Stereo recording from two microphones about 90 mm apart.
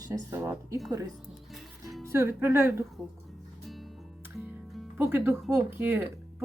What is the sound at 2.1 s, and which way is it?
Speech, 30° right (ahead or behind).